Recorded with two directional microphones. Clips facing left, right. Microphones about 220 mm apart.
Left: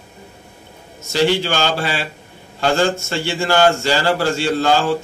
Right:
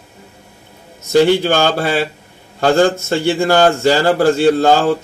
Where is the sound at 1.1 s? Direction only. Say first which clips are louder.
Right 6 dB; 50° right (ahead or behind).